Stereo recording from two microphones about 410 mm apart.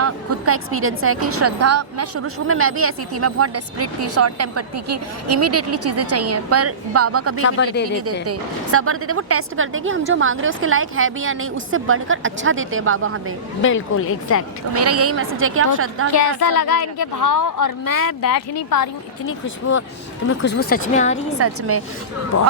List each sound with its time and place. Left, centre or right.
0.0 s a woman's voice: right
7.4 s speech: left
8.0 s a woman's voice: right
13.6 s a woman's voice: left
14.7 s a woman's voice: right
17.0 s a woman's voice: left
18.5 s speech: left
19.3 s speech: left
21.3 s a woman's voice: right